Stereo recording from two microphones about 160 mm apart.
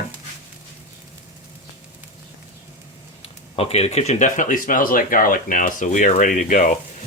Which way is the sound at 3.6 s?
40° left (ahead or behind).